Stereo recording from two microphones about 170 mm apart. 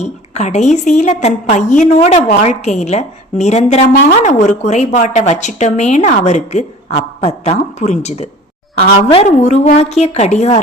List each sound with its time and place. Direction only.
0.0 s a woman's voice: 45° left (ahead or behind)